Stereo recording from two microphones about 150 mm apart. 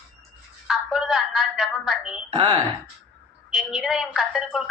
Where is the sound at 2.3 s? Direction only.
30° right (ahead or behind).